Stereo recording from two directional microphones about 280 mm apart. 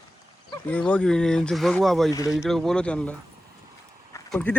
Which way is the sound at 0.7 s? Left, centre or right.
Centre.